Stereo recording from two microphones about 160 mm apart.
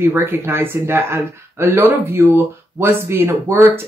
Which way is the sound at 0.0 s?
15° right (ahead or behind).